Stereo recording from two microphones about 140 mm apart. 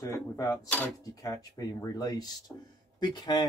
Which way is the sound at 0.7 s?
10° left (ahead or behind).